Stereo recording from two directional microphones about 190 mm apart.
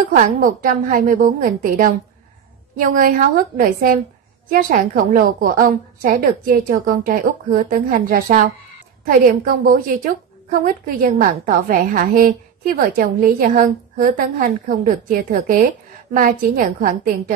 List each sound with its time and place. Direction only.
0.1 s a woman's voice: 45° right (ahead or behind)